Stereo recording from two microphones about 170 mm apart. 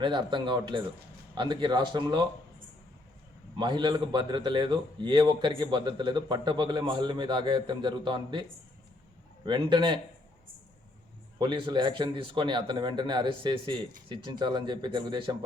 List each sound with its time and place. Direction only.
0.0 s a man's voice: 30° right (ahead or behind)
3.6 s a man's voice: 25° right (ahead or behind)
9.5 s a man's voice: 30° right (ahead or behind)
11.3 s a man's voice: 30° right (ahead or behind)